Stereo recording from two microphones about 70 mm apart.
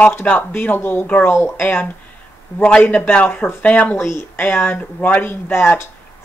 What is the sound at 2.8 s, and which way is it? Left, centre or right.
Speech, centre.